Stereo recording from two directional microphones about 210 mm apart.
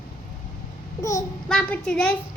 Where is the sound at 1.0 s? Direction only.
15° left (ahead or behind).